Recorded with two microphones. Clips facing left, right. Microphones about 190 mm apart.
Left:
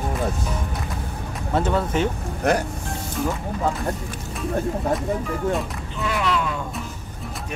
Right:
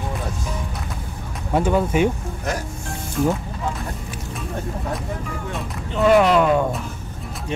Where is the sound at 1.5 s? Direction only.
10° right (ahead or behind).